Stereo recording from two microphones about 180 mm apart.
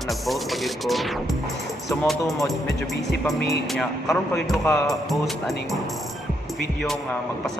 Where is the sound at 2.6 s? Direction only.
70° left (ahead or behind).